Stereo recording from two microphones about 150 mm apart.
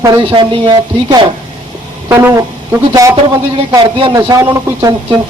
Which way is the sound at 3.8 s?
35° right (ahead or behind).